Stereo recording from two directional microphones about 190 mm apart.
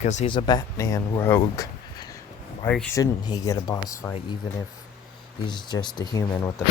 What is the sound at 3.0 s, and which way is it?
Speech, 20° left (ahead or behind).